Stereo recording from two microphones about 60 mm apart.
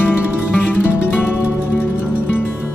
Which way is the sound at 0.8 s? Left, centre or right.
Left.